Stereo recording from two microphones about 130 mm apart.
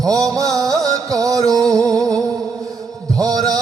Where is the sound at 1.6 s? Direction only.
5° left (ahead or behind).